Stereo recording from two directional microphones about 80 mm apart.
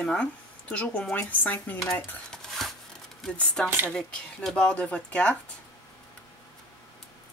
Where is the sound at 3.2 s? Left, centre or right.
Centre.